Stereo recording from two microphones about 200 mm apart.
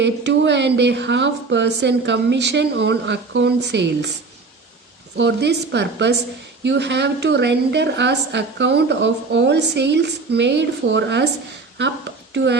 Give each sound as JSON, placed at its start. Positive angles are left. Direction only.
{"t": 0.0, "sound": "a woman's voice", "side_deg": -60}
{"t": 5.1, "sound": "a woman's voice", "side_deg": -60}